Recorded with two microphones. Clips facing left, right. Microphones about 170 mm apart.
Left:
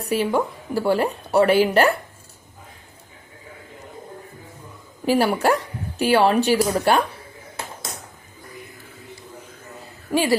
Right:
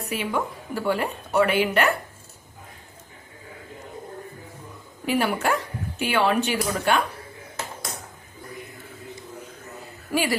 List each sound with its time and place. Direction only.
0.0 s a woman's voice: 35° left (ahead or behind)
5.0 s a woman's voice: 35° left (ahead or behind)
10.1 s speech: 30° left (ahead or behind)